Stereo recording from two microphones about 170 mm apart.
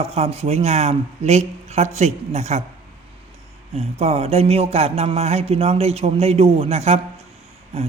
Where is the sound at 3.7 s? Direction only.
35° right (ahead or behind).